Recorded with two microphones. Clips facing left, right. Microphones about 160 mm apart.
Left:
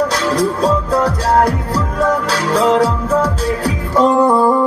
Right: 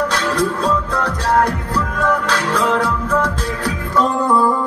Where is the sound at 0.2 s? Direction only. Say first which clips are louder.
Left 3 dB; 35° left (ahead or behind).